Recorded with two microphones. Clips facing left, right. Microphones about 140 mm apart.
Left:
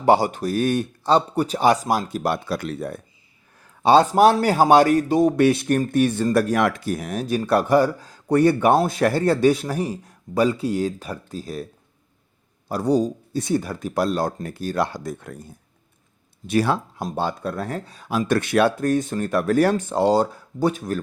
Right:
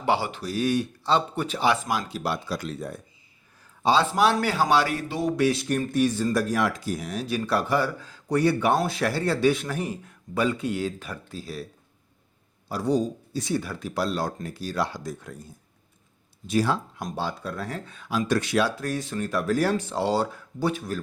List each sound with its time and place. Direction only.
0.0 s speech: 45° left (ahead or behind); by 3.0 s 60° left (ahead or behind)
3.6 s a sound: 60° left (ahead or behind)
4.0 s speech: 45° left (ahead or behind)
8.7 s a man's voice: 40° left (ahead or behind); by 15.4 s 60° left (ahead or behind)
16.5 s speech: 60° left (ahead or behind)
17.2 s speech: 50° left (ahead or behind)
18.3 s speech: 60° left (ahead or behind)